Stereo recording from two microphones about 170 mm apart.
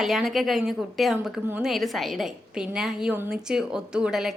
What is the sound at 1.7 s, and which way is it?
A woman's voice, centre (ahead or behind).